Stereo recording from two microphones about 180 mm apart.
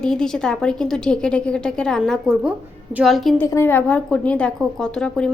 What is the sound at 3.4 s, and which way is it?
A woman's voice, 15° left (ahead or behind).